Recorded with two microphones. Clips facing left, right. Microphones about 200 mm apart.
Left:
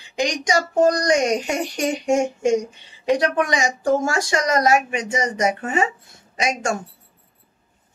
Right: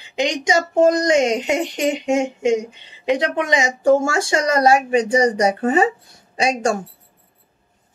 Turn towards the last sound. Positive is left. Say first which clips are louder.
# right 4 dB
turn(degrees=-30)  # may be behind; listen again after turning